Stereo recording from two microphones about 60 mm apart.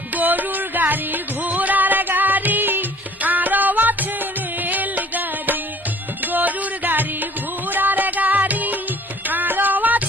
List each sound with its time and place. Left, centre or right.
0.1 s music: right